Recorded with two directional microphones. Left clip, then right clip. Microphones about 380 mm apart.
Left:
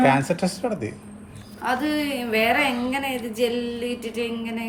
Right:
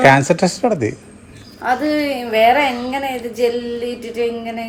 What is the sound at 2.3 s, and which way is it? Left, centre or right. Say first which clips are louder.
A woman's voice: right 8 dB; centre.